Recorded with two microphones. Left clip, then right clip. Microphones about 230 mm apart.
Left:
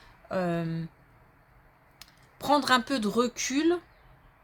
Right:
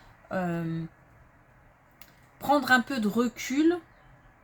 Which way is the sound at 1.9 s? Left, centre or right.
Left.